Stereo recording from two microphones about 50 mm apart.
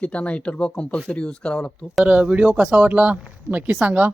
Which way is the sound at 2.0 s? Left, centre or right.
Right.